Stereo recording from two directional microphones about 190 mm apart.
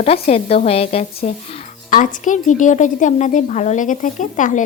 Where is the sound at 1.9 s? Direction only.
45° left (ahead or behind).